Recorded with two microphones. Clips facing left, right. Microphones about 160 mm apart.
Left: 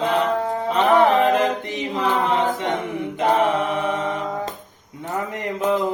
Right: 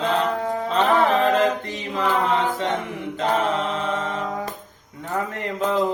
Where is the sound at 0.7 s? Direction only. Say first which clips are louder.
Left 3 dB; 20° left (ahead or behind).